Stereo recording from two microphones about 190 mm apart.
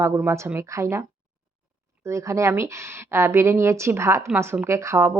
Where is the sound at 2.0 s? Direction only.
15° right (ahead or behind).